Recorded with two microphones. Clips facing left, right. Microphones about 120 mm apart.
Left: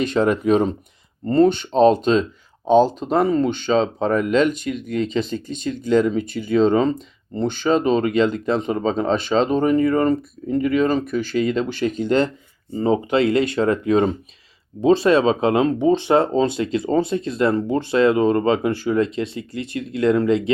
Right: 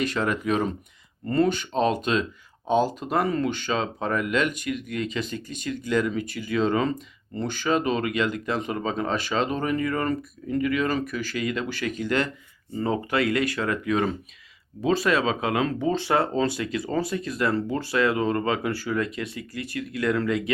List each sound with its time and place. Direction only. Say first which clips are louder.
0.0 s speech: left 7 dB; 30° left (ahead or behind)